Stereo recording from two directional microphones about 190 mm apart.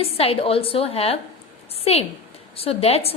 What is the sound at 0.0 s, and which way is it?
A woman's voice, 30° left (ahead or behind).